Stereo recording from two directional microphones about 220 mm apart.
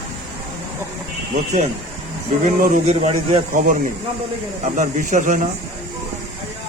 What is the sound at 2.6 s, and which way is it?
Speech, 35° right (ahead or behind).